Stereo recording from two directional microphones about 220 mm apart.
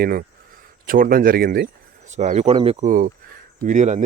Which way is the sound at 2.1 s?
30° right (ahead or behind).